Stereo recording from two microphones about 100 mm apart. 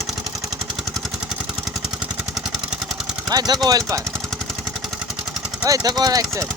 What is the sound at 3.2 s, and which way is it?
Speech, 40° right (ahead or behind).